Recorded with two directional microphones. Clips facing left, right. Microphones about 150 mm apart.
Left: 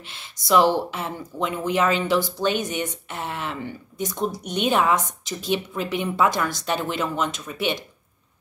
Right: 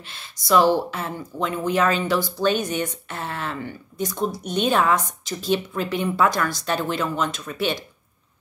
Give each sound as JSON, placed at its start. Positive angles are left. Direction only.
{"t": 0.0, "sound": "speech", "side_deg": 20}